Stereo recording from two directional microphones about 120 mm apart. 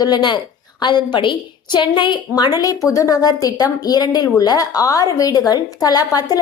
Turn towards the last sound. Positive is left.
turn(degrees=30)  # may be behind; listen again after turning